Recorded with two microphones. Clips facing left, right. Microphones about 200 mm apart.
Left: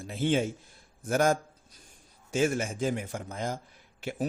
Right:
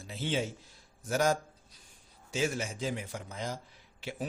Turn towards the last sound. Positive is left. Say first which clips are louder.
# left 6 dB
turn(degrees=50)  # may be behind; listen again after turning